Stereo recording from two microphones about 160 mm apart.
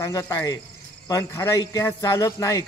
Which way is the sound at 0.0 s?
20° left (ahead or behind).